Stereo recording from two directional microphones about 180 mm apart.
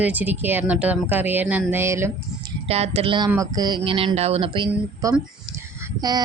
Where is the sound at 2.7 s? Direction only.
35° right (ahead or behind).